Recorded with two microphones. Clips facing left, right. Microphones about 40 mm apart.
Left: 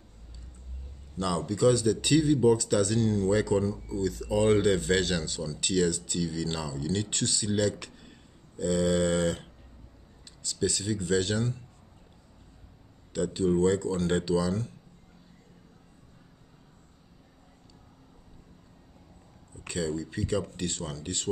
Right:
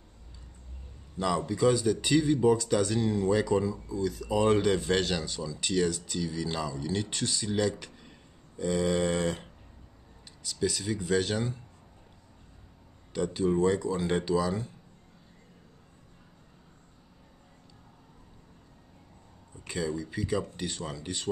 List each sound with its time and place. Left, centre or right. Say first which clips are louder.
1.1 s speech: right 1 dB; centre
8.5 s a sound: left 2 dB; centre
11.3 s speech: left 1 dB; centre
13.1 s speech: left 1 dB; centre
19.7 s a sound: left 1 dB; centre
20.5 s speech: left 1 dB; centre